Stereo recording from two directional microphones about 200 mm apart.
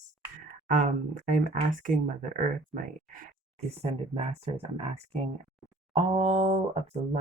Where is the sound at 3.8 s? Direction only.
30° right (ahead or behind).